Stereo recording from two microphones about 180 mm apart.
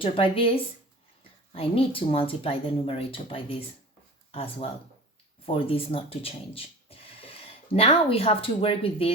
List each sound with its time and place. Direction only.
0.0 s speech: 30° left (ahead or behind)
5.5 s speech: 30° left (ahead or behind)